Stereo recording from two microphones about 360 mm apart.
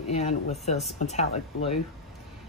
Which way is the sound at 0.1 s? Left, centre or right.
Centre.